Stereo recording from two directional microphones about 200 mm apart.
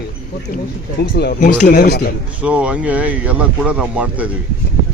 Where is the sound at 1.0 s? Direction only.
55° left (ahead or behind).